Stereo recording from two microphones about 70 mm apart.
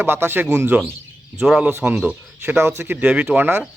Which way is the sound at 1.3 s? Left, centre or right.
Centre.